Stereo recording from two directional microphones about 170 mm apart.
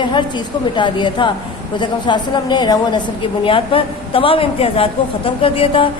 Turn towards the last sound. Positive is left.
turn(degrees=30)  # may be behind; listen again after turning